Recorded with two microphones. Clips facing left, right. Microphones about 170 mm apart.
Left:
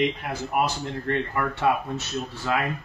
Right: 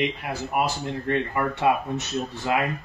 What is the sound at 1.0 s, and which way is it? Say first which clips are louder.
Speech: right 1 dB; 15° right (ahead or behind).